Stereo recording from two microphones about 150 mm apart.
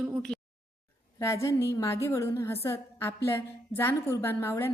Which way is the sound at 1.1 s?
20° left (ahead or behind).